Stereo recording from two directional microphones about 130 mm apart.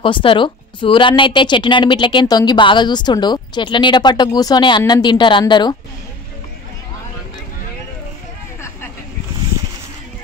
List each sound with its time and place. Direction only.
0.0 s a woman's voice: 40° left (ahead or behind)